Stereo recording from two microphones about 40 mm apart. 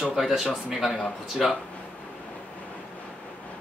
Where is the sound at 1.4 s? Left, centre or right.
Centre.